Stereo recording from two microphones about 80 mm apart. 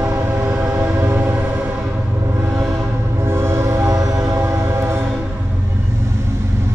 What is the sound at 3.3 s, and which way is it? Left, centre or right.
Train, right.